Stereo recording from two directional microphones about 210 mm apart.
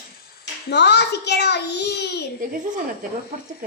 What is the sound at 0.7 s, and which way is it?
A child's voice, 55° left (ahead or behind).